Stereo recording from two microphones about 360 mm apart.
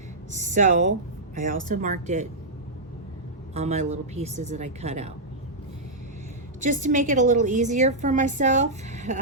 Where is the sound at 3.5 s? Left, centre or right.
Centre.